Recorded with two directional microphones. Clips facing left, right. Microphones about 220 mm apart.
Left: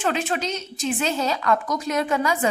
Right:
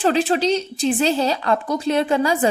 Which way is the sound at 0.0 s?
35° right (ahead or behind).